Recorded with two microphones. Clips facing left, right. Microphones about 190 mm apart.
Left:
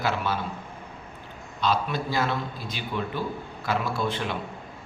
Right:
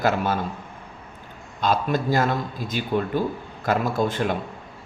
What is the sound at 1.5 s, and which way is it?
Speech, 45° right (ahead or behind).